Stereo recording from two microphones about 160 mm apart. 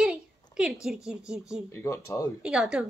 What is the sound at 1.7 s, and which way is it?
Speech, 15° left (ahead or behind).